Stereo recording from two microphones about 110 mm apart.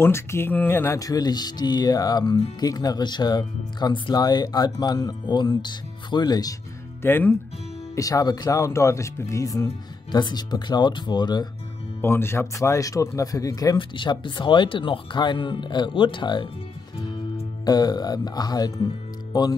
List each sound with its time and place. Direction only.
0.0 s speech: 25° left (ahead or behind)
7.0 s speech: 20° left (ahead or behind)
7.9 s speech: 30° left (ahead or behind)
10.1 s speech: 40° left (ahead or behind)
12.0 s speech: 20° left (ahead or behind)
13.7 s speech: 45° left (ahead or behind)
17.6 s speech: 35° left (ahead or behind)